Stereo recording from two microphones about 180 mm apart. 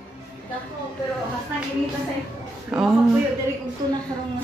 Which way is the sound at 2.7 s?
5° right (ahead or behind).